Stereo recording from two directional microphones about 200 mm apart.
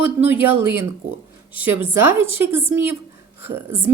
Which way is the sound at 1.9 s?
10° right (ahead or behind).